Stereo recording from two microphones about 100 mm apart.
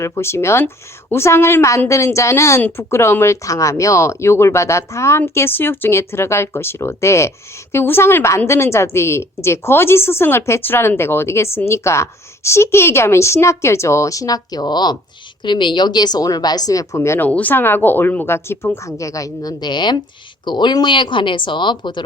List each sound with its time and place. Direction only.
0.0 s a woman's voice: 25° left (ahead or behind)
17.2 s a woman's voice: 15° left (ahead or behind); by 22.0 s 50° left (ahead or behind)